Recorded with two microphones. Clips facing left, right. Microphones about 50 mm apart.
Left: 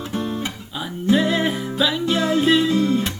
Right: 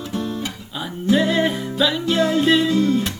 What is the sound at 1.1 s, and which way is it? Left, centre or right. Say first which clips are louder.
Music: right 1 dB; centre.